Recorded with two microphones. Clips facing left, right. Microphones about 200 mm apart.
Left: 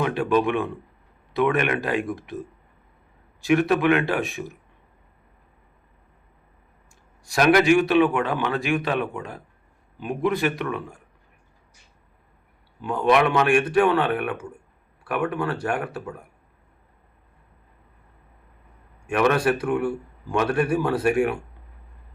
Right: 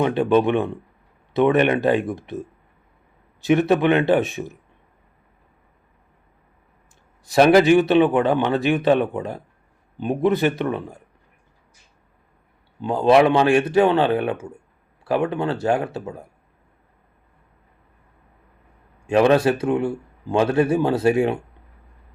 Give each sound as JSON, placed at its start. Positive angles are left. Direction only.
{"t": 0.0, "sound": "speech", "side_deg": -25}
{"t": 3.4, "sound": "speech", "side_deg": -25}
{"t": 7.3, "sound": "speech", "side_deg": -30}
{"t": 12.8, "sound": "speech", "side_deg": -25}
{"t": 19.0, "sound": "speech", "side_deg": -30}